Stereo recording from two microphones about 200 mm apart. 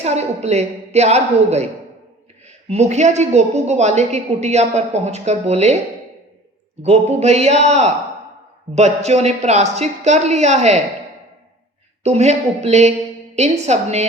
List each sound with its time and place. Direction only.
0.0 s a woman's voice: 35° right (ahead or behind)
2.6 s a woman's voice: 35° right (ahead or behind)
6.8 s a woman's voice: 30° right (ahead or behind)
12.0 s a woman's voice: 35° right (ahead or behind)